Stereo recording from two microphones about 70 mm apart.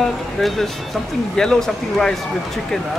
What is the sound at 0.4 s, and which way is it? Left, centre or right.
Speech, centre.